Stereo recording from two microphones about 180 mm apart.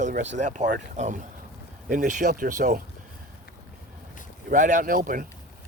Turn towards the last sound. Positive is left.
turn(degrees=-50)  # may be behind; listen again after turning